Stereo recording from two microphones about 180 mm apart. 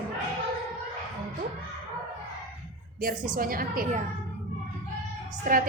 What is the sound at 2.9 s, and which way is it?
A woman's voice, 55° right (ahead or behind).